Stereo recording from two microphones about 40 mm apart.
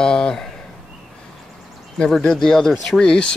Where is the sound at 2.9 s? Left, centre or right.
Left.